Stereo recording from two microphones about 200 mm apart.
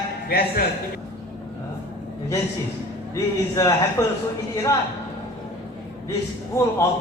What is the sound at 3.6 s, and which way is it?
Speech, 15° left (ahead or behind).